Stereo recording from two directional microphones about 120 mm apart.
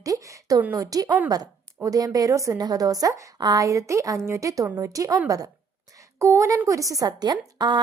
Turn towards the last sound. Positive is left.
turn(degrees=-40)  # may be behind; listen again after turning